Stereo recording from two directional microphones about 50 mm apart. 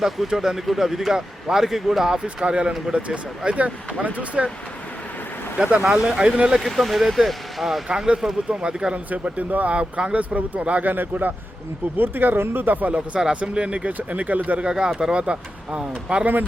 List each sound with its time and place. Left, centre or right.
0.0 s speech: centre
2.2 s speech: right
5.5 s speech: right
6.6 s speech: centre
7.9 s speech: centre
9.0 s speech: right
13.3 s speech: right
14.6 s speech: centre